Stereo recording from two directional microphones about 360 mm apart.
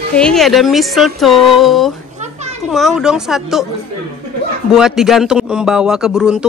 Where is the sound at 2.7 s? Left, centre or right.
Centre.